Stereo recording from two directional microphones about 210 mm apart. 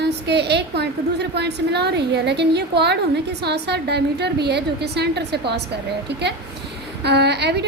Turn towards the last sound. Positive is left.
turn(degrees=-55)  # may be behind; listen again after turning